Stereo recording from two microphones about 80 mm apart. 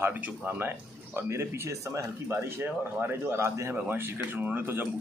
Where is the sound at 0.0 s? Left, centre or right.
Right.